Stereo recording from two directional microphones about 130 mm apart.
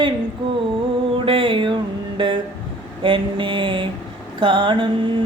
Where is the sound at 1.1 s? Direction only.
40° right (ahead or behind).